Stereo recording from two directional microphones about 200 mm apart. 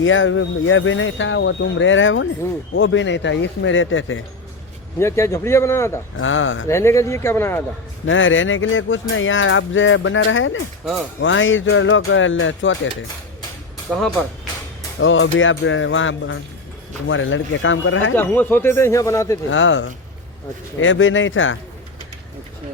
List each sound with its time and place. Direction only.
0.0 s speech: 75° left (ahead or behind)
4.9 s speech: 15° left (ahead or behind)
6.1 s speech: 75° left (ahead or behind)
6.7 s speech: 15° left (ahead or behind)
8.0 s speech: 75° left (ahead or behind)
15.0 s speech: 75° left (ahead or behind)
18.2 s speech: 10° left (ahead or behind)
19.5 s speech: 75° left (ahead or behind)